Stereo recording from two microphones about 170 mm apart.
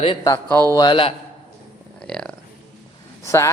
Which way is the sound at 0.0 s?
30° left (ahead or behind).